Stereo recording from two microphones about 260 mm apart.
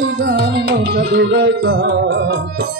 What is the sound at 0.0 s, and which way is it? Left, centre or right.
Music, right.